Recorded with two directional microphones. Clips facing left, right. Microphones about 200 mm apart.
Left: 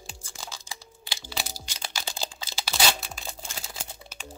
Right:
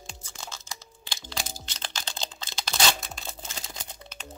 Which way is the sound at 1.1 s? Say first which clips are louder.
Left 1 dB; 5° left (ahead or behind).